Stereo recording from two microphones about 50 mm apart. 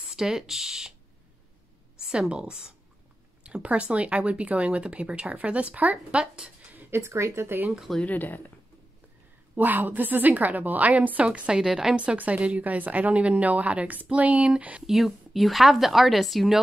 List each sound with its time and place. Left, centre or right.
0.1 s speech: centre
2.1 s a woman's voice: centre
6.1 s a woman's voice: centre
6.9 s speech: right
8.0 s speech: left
9.6 s a woman's voice: right; by 11.9 s centre
11.9 s a woman's voice: right
14.9 s a woman's voice: centre